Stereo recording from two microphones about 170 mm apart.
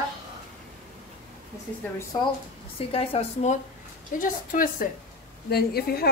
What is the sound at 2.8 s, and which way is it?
Speech, 35° left (ahead or behind).